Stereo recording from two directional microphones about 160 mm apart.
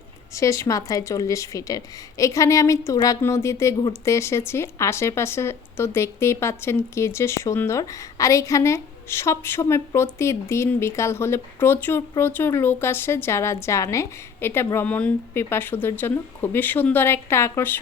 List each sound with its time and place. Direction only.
0.3 s speech: 20° left (ahead or behind)